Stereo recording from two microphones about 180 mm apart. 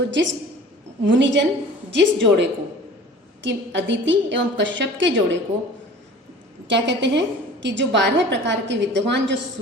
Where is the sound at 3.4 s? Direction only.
80° right.